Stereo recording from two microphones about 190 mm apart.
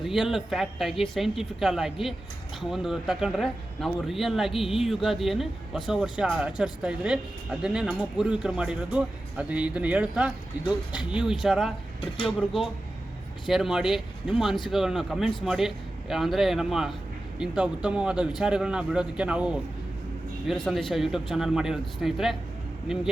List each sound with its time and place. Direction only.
0.0 s speech: centre (ahead or behind)
11.9 s speech: 30° left (ahead or behind)
12.4 s speech: centre (ahead or behind)